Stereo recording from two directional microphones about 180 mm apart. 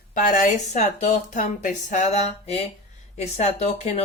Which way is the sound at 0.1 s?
50° left (ahead or behind).